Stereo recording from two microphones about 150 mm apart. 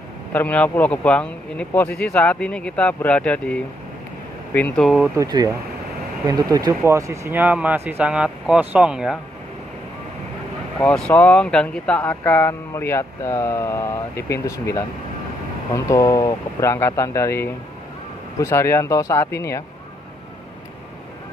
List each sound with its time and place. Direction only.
0.3 s speech: 10° left (ahead or behind)
4.6 s speech: 10° left (ahead or behind)
4.8 s speech: 5° right (ahead or behind)
5.1 s speech: 25° right (ahead or behind); by 9.2 s 5° right (ahead or behind)
10.8 s speech: 5° left (ahead or behind); by 19.2 s 20° left (ahead or behind)